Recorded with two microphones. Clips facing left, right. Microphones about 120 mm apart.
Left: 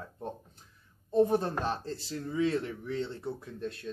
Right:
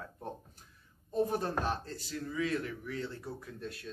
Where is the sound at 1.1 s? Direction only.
25° left (ahead or behind).